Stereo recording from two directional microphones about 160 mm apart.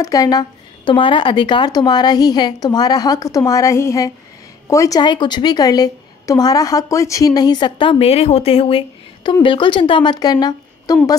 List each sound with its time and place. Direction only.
0.0 s a woman's voice: 20° left (ahead or behind)